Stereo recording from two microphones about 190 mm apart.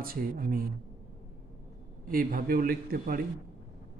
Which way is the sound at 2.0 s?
50° right (ahead or behind).